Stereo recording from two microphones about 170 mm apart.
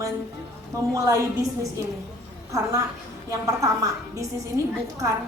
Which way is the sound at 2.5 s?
20° right (ahead or behind).